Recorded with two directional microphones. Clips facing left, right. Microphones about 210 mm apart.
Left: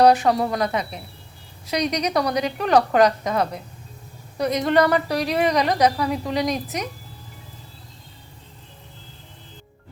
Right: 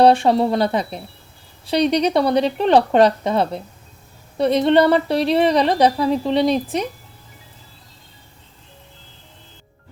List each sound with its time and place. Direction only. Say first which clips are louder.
0.0 s a woman's voice: right 3 dB; 30° right (ahead or behind)